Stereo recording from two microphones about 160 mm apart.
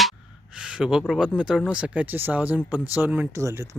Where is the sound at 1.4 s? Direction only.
5° right (ahead or behind).